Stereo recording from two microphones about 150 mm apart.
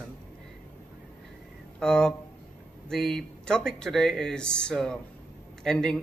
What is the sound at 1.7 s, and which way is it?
Speech, 5° left (ahead or behind).